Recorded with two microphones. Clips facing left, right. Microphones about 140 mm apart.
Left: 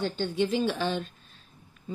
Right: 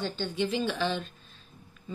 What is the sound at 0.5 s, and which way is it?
Speech, 50° left (ahead or behind).